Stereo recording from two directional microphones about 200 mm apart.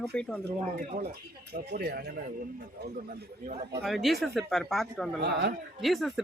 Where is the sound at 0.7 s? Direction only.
40° right (ahead or behind).